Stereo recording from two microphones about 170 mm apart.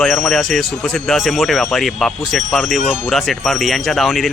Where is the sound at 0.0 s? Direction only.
Centre (ahead or behind).